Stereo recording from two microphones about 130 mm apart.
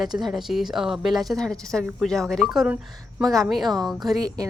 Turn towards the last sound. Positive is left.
turn(degrees=-30)  # may be behind; listen again after turning